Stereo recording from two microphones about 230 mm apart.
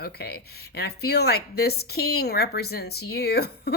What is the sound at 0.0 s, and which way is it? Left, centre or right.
Speech, left.